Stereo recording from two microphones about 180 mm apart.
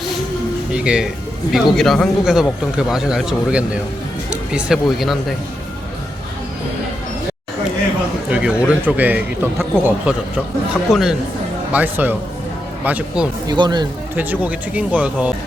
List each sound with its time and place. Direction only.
0.7 s speech: 5° right (ahead or behind)
8.3 s a man's voice: 5° right (ahead or behind)
13.5 s speech: 25° right (ahead or behind)
14.2 s a man's voice: 10° right (ahead or behind)